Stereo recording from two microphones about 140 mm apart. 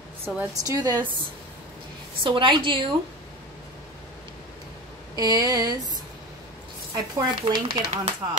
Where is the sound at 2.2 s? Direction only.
35° right (ahead or behind).